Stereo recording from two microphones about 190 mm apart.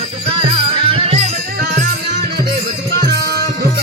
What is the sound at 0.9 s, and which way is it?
Music, 35° right (ahead or behind).